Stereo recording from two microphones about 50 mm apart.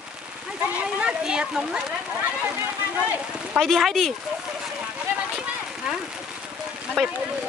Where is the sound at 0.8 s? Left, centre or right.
Right.